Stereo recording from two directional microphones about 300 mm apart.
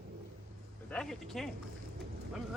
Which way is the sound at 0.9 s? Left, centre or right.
Centre.